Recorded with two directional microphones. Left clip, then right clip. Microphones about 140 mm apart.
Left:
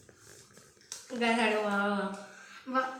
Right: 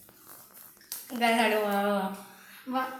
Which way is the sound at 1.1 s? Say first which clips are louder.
Right 3 dB; 35° right (ahead or behind).